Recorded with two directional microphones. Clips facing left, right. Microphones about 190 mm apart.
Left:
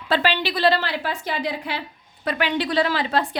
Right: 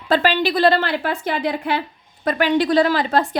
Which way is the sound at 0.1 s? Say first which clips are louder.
Right 4 dB; 45° right (ahead or behind).